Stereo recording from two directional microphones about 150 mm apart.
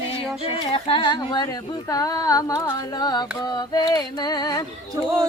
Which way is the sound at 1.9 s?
25° left (ahead or behind).